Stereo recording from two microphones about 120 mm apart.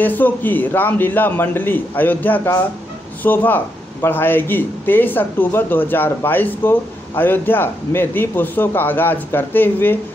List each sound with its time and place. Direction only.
0.0 s speech: 15° left (ahead or behind)